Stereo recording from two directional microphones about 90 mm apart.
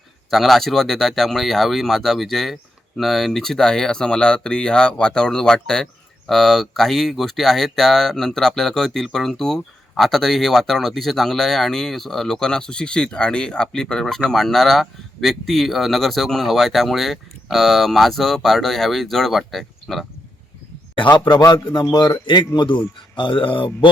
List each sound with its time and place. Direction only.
0.3 s speech: centre (ahead or behind)
21.2 s speech: 55° left (ahead or behind)
23.1 s mantra: 65° left (ahead or behind)